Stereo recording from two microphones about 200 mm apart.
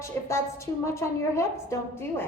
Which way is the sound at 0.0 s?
15° left (ahead or behind).